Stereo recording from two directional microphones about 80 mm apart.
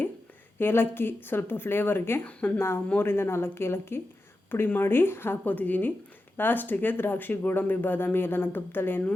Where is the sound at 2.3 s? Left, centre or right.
Centre.